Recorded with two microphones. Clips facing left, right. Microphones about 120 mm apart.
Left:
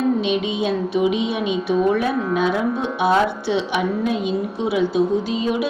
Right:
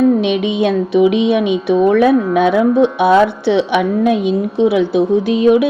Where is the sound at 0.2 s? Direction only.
65° right (ahead or behind).